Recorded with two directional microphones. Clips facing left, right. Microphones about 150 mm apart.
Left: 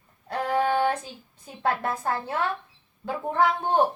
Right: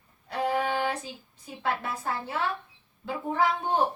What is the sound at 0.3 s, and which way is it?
Music, 50° left (ahead or behind).